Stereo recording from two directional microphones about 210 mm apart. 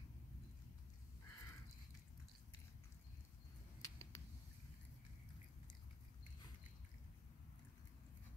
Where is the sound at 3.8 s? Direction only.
15° left (ahead or behind).